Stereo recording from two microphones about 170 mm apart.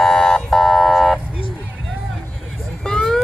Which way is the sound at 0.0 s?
Centre (ahead or behind).